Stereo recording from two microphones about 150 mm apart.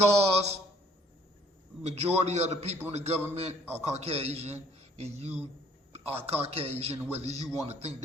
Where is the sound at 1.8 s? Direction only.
45° right (ahead or behind).